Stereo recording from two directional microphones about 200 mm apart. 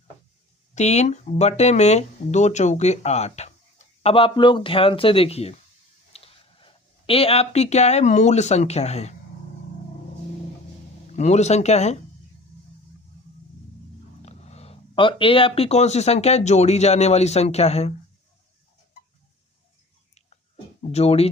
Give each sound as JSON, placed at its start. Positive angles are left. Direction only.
{"t": 0.7, "sound": "speech", "side_deg": 35}
{"t": 11.1, "sound": "speech", "side_deg": 35}
{"t": 14.2, "sound": "speech", "side_deg": 35}
{"t": 20.9, "sound": "speech", "side_deg": 30}